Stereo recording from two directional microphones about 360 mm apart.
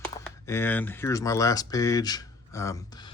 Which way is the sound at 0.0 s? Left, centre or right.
Centre.